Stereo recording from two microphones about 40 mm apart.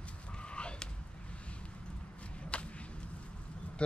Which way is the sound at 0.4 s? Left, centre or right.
Left.